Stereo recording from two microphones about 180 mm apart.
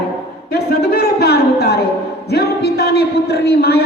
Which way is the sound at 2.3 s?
65° left (ahead or behind).